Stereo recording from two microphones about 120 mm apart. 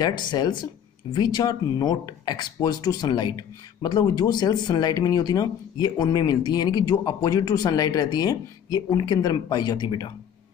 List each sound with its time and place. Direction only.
0.0 s speech: 35° left (ahead or behind)